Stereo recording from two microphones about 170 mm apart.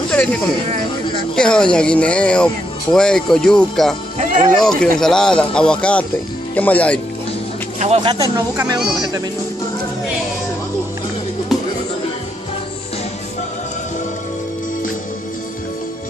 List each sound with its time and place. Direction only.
0.1 s a sound: 5° left (ahead or behind)
1.3 s speech: 5° left (ahead or behind)
4.2 s music: 45° right (ahead or behind)
4.6 s speech: 5° left (ahead or behind)
7.8 s speech: 40° right (ahead or behind)
8.1 s speech: 25° right (ahead or behind)